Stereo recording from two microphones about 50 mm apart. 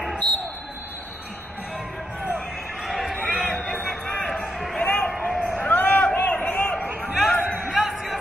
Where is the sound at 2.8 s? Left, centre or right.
Centre.